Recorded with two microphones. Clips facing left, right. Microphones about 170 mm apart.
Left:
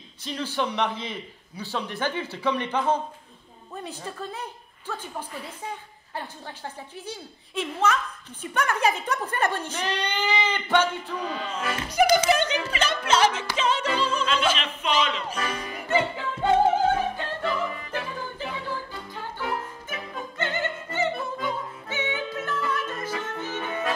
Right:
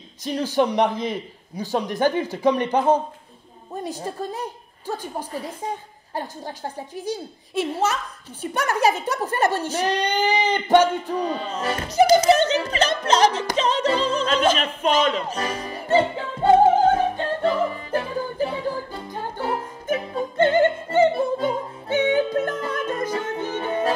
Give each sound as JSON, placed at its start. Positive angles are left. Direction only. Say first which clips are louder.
{"t": 0.2, "sound": "a woman's voice", "louder": "right 7 dB", "side_deg": -40}
{"t": 15.3, "sound": "music", "louder": "right 3 dB", "side_deg": -30}
{"t": 20.0, "sound": "music", "louder": "right 9 dB", "side_deg": -30}
{"t": 20.5, "sound": "opera", "louder": "right 10 dB", "side_deg": -50}
{"t": 21.1, "sound": "music", "louder": "right 8 dB", "side_deg": -30}
{"t": 21.8, "sound": "music", "louder": "right 12 dB", "side_deg": -50}
{"t": 23.5, "sound": "music", "louder": "right 6 dB", "side_deg": -30}